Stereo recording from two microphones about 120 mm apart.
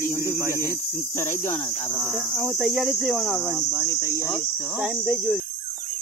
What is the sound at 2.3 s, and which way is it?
Speech, 5° left (ahead or behind).